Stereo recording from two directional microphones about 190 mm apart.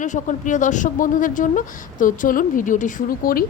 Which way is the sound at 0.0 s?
40° left (ahead or behind).